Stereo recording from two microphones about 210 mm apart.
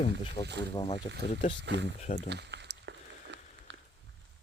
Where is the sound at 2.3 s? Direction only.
55° right (ahead or behind).